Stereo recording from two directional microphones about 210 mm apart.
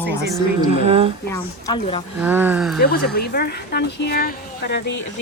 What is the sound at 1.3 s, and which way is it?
Speech, 20° left (ahead or behind).